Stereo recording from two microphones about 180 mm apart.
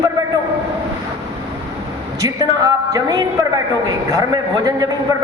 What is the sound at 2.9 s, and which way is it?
A man's voice, 20° right (ahead or behind).